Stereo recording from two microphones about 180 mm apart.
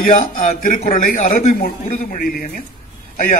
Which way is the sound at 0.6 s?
45° left (ahead or behind).